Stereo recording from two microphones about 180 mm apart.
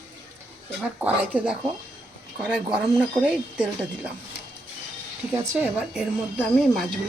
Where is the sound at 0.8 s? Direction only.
10° right (ahead or behind).